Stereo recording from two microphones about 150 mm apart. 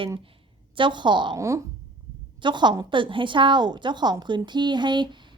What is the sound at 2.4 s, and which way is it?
A woman's voice, 30° right (ahead or behind).